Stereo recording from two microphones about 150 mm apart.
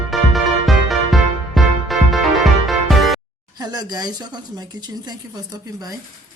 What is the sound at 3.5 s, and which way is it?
Speech, 25° right (ahead or behind).